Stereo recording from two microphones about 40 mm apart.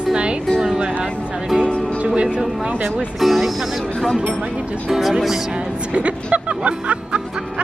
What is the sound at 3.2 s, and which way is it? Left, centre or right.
Speech, centre.